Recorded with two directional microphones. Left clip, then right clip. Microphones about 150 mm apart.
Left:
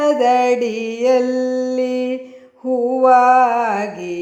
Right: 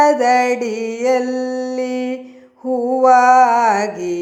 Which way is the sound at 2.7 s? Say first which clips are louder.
Even; centre (ahead or behind).